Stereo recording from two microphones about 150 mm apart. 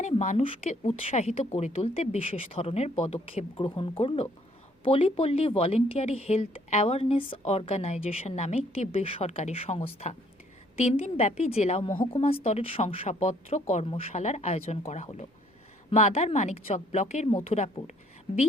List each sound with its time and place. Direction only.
0.0 s a woman's voice: 50° left (ahead or behind)